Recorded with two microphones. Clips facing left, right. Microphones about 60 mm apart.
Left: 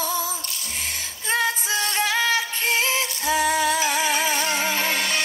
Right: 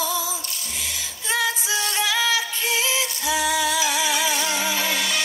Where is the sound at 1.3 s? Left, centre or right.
Left.